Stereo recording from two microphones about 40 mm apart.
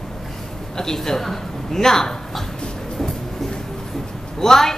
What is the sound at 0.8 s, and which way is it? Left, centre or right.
A man's voice, centre.